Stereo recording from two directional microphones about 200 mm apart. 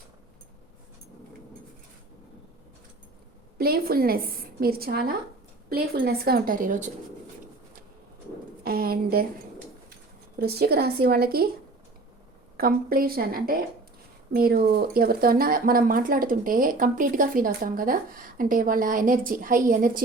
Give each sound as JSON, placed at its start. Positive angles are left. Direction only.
{"t": 3.6, "sound": "speech", "side_deg": -50}
{"t": 8.6, "sound": "a sound", "side_deg": -50}
{"t": 10.3, "sound": "speech", "side_deg": -50}
{"t": 12.5, "sound": "speech", "side_deg": -45}